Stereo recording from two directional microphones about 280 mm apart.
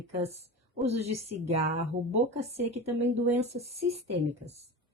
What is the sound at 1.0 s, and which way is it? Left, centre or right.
Speech, right.